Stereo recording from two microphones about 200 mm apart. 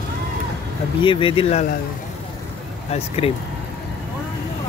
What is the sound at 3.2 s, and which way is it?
Speech, 30° left (ahead or behind).